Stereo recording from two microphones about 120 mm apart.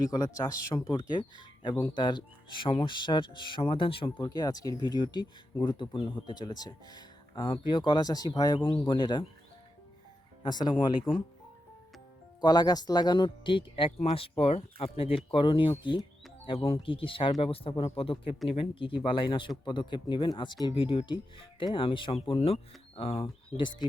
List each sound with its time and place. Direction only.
0.3 s speech: 30° left (ahead or behind)
0.9 s speech: 40° left (ahead or behind)
4.2 s speech: 35° left (ahead or behind)
10.4 s speech: 40° left (ahead or behind)
12.4 s speech: 35° left (ahead or behind); by 23.2 s 55° left (ahead or behind)
23.6 s speech: 40° left (ahead or behind)